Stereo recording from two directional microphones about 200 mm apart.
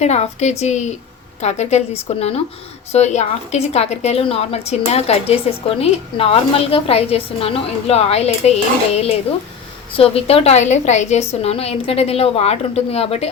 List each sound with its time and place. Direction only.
0.0 s a woman's voice: 35° left (ahead or behind)